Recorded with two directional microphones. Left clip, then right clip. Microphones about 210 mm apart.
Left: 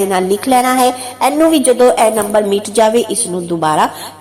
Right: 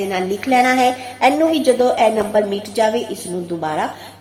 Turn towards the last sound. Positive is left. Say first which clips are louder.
# left 8 dB
turn(degrees=25)  # may be behind; listen again after turning